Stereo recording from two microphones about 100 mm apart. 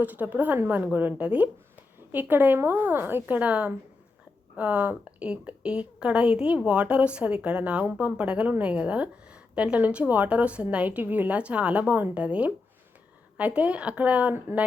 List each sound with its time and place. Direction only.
0.0 s speech: 15° right (ahead or behind)